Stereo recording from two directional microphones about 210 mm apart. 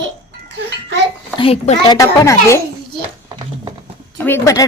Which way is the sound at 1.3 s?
25° left (ahead or behind).